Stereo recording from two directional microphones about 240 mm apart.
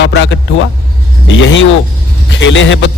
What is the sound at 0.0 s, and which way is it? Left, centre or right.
Speech, left.